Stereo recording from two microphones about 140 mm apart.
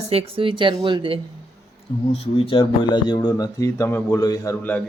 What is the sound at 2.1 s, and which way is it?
Speech, 45° left (ahead or behind).